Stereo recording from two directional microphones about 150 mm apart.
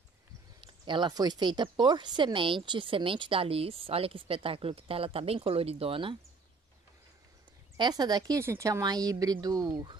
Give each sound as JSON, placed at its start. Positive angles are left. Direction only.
{"t": 0.6, "sound": "speech", "side_deg": -30}
{"t": 7.7, "sound": "a woman's voice", "side_deg": -30}